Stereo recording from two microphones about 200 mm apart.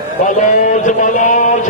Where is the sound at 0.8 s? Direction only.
40° left (ahead or behind).